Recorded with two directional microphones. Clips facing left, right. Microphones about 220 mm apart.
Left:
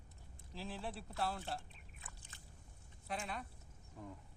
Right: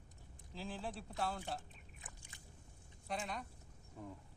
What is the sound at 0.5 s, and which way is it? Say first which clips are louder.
Speech: right 1 dB; centre (ahead or behind).